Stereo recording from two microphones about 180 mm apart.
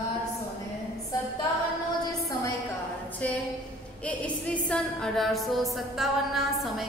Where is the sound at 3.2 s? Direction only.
10° left (ahead or behind).